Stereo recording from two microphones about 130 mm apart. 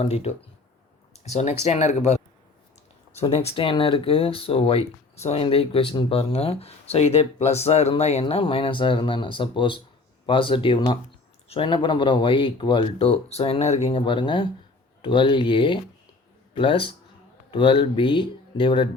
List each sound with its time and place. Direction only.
0.0 s speech: 55° left (ahead or behind)
1.1 s a sound: 60° left (ahead or behind)
1.6 s speech: 55° left (ahead or behind)
13.9 s speech: 40° left (ahead or behind)